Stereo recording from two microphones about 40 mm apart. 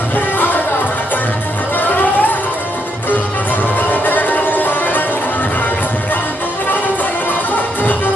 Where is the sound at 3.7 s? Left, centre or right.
Left.